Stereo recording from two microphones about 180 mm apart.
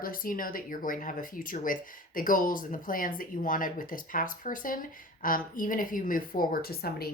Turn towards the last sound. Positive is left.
turn(degrees=60)  # may be behind; listen again after turning